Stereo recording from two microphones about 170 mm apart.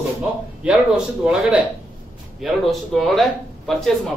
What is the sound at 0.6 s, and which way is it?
A man's voice, 5° right (ahead or behind).